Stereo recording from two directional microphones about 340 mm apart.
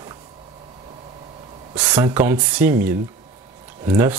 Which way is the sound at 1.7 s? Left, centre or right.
Centre.